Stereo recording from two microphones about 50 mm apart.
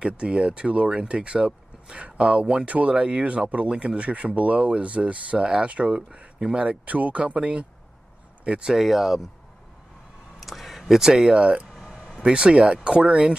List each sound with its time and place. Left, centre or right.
0.0 s speech: centre
5.9 s speech: centre
8.5 s speech: centre
8.7 s speech: centre
10.4 s a sound: centre
12.2 s speech: centre